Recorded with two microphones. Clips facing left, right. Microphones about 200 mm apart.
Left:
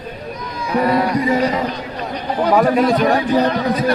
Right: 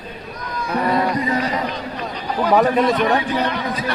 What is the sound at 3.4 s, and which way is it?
Speech, 40° left (ahead or behind).